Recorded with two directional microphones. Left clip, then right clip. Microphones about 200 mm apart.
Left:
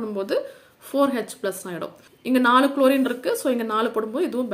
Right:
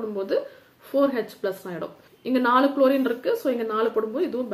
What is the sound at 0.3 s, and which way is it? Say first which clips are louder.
Speech: left 1 dB; 30° left (ahead or behind).